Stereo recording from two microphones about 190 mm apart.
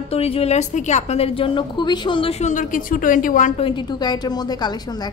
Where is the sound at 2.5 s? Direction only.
45° left (ahead or behind).